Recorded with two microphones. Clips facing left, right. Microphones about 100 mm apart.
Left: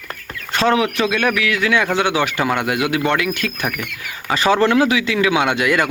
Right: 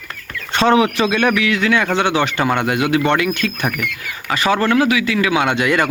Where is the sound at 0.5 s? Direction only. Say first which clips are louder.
Right 3 dB; centre (ahead or behind).